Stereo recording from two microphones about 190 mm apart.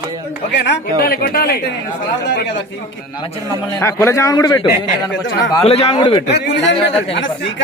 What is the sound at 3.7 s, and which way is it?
A man's voice, 15° left (ahead or behind).